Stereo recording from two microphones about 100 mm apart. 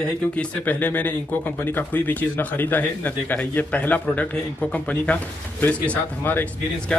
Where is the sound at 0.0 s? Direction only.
15° left (ahead or behind).